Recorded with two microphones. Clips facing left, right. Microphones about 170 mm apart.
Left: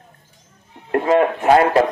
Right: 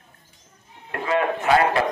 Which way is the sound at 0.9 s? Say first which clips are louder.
Left 7 dB; 40° left (ahead or behind).